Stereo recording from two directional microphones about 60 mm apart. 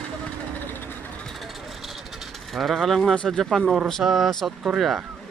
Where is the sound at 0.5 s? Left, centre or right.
Left.